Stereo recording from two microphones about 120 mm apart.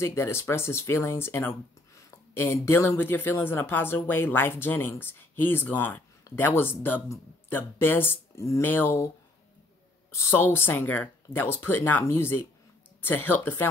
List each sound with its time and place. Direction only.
0.0 s speech: 20° left (ahead or behind)
10.1 s speech: 20° left (ahead or behind)